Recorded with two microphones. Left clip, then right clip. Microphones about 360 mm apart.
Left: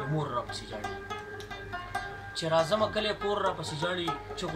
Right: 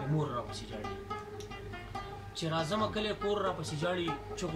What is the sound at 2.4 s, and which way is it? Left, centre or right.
A man's voice, centre.